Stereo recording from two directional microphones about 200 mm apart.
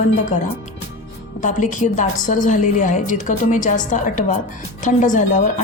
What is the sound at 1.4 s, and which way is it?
A woman's voice, 40° left (ahead or behind).